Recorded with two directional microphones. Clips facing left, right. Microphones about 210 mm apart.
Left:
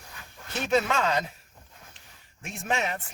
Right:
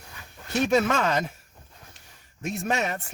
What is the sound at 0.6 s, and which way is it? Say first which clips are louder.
Speech: right 2 dB; 45° right (ahead or behind).